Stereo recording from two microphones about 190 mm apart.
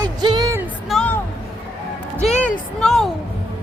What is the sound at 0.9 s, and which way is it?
Music, 5° left (ahead or behind).